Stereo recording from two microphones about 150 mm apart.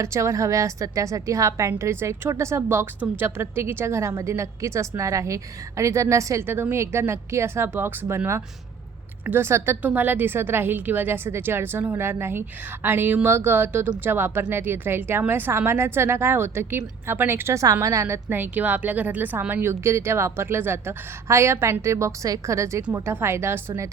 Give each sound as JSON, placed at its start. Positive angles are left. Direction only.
{"t": 0.0, "sound": "a woman's voice", "side_deg": -20}